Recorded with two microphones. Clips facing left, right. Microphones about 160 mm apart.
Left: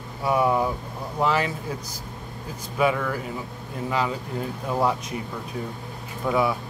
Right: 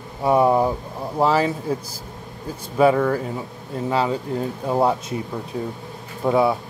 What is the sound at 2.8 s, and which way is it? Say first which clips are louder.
Speech: right 7 dB; 30° right (ahead or behind).